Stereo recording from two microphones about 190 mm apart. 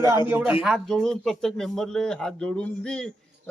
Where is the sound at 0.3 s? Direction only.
10° right (ahead or behind).